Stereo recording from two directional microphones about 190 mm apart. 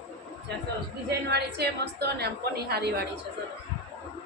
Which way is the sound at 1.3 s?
60° right (ahead or behind).